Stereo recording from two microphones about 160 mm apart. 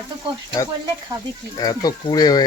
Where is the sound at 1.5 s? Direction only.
25° left (ahead or behind).